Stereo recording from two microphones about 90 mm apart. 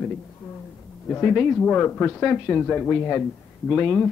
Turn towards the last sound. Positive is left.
turn(degrees=15)  # may be behind; listen again after turning